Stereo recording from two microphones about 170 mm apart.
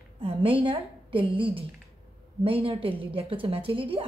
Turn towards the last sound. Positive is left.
turn(degrees=-30)  # may be behind; listen again after turning